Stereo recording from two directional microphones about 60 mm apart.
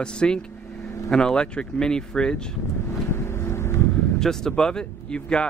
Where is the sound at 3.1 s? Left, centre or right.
Left.